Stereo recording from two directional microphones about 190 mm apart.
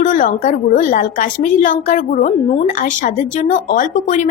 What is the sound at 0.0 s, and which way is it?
Speech, 45° left (ahead or behind).